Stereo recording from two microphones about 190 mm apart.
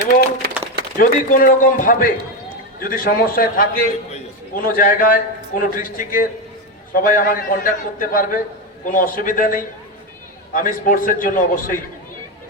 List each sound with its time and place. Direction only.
0.9 s a man's voice: 45° left (ahead or behind)